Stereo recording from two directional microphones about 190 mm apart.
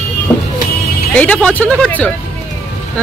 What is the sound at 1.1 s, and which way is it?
Speech, 5° left (ahead or behind).